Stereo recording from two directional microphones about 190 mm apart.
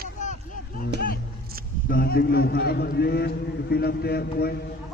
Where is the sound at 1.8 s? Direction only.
50° left (ahead or behind).